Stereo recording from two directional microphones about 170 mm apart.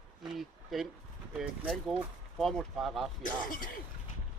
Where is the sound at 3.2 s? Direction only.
55° left (ahead or behind).